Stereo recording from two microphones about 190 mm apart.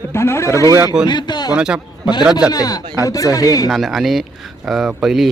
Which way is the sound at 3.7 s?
Centre (ahead or behind).